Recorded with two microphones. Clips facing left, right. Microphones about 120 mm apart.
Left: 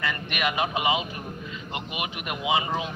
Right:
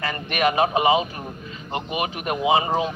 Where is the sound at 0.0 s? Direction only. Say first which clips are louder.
Right 6 dB; 40° right (ahead or behind).